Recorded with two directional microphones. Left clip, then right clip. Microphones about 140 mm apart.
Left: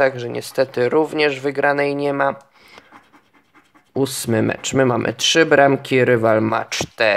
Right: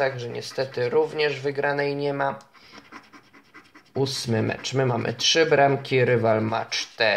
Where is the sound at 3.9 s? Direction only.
55° left (ahead or behind).